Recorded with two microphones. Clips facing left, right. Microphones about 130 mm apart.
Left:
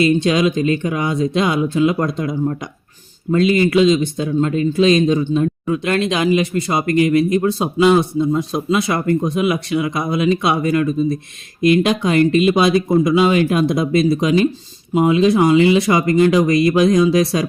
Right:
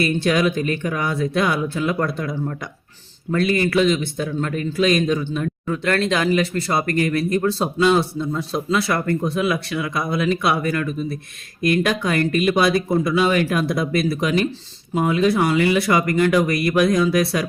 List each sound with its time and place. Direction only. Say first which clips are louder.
0.0 s a man's voice: left 4 dB; 20° left (ahead or behind)